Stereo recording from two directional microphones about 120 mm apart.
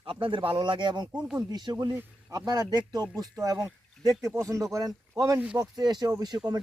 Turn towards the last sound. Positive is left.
turn(degrees=-35)  # may be behind; listen again after turning